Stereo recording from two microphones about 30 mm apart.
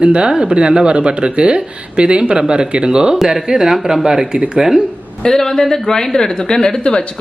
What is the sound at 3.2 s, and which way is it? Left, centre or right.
Speech, centre.